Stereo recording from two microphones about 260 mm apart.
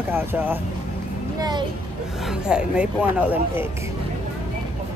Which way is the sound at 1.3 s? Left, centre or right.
Centre.